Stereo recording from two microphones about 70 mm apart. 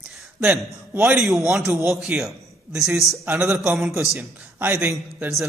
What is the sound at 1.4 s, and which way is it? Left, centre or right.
Speech, centre.